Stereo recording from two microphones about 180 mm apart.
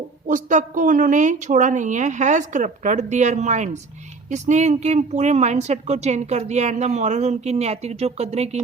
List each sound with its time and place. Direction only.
0.3 s a woman's voice: 45° right (ahead or behind)